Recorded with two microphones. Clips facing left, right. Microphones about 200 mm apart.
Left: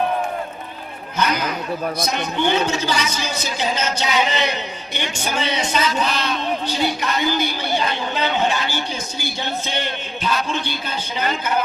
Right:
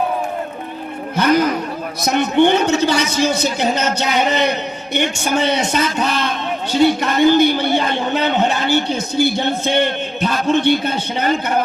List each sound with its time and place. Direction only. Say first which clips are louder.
1.1 s a man's voice: right 7 dB; 55° right (ahead or behind)